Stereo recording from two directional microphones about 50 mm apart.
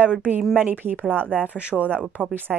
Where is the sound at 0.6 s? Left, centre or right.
Right.